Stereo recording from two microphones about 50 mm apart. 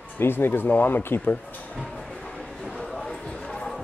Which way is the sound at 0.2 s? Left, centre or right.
Left.